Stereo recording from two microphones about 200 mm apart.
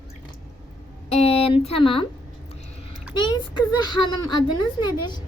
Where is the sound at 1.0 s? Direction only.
30° left (ahead or behind).